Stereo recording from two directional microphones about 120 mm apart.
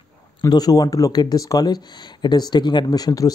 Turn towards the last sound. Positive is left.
turn(degrees=30)  # may be behind; listen again after turning